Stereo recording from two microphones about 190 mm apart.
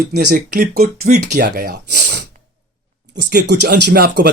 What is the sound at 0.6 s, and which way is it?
Speech, 40° right (ahead or behind).